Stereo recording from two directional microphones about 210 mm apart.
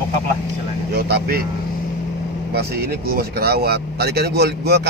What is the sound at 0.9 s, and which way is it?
Speech, 50° right (ahead or behind).